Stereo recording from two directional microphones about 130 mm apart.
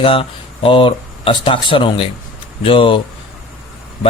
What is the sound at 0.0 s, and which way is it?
Speech, 45° left (ahead or behind).